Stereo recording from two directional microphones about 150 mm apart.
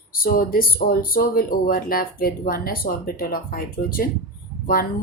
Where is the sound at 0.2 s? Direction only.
75° left (ahead or behind).